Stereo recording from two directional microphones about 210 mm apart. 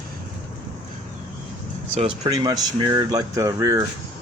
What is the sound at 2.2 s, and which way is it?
Speech, 15° right (ahead or behind).